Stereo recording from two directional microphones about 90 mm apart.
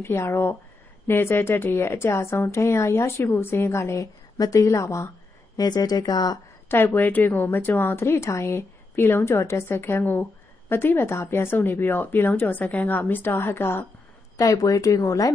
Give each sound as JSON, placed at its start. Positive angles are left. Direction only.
{"t": 0.0, "sound": "a woman's voice", "side_deg": 25}
{"t": 5.6, "sound": "speech", "side_deg": 45}
{"t": 6.7, "sound": "a woman's voice", "side_deg": 25}
{"t": 14.4, "sound": "speech", "side_deg": 40}